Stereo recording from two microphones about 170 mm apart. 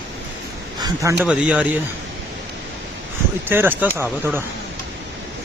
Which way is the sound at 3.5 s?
10° right (ahead or behind).